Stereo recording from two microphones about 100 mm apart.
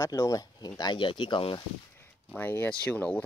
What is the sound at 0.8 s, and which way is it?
Speech, 50° left (ahead or behind).